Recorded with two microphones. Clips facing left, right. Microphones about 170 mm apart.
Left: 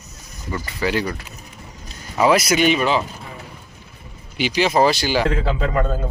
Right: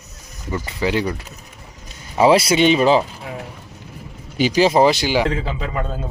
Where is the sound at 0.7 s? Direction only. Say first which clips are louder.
Right 1 dB; 20° right (ahead or behind).